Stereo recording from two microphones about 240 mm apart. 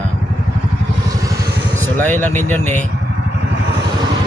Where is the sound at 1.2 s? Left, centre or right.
Centre.